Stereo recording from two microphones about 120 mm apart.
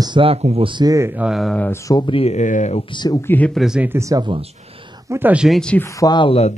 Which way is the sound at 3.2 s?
15° left (ahead or behind).